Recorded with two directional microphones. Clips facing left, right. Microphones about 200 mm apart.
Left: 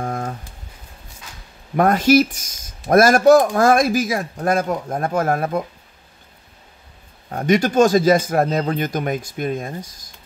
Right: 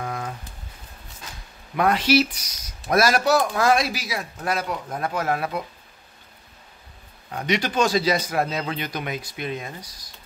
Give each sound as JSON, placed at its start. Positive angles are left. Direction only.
{"t": 0.0, "sound": "a sound", "side_deg": 45}
{"t": 1.8, "sound": "speech", "side_deg": 45}
{"t": 7.2, "sound": "speech", "side_deg": 45}